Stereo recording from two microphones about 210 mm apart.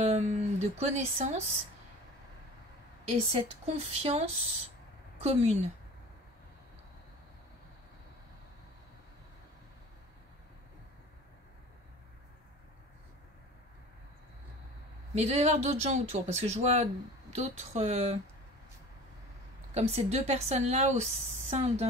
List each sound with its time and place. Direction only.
0.0 s a woman's voice: 30° right (ahead or behind)
3.1 s a woman's voice: 30° right (ahead or behind)
15.1 s a woman's voice: 30° right (ahead or behind)
19.7 s a woman's voice: 30° right (ahead or behind)